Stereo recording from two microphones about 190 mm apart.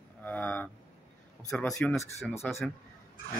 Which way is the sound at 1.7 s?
15° left (ahead or behind).